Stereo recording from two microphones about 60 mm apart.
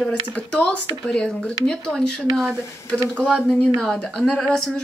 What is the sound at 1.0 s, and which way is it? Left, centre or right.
Speech, centre.